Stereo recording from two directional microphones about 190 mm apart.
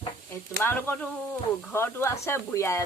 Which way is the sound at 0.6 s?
10° left (ahead or behind).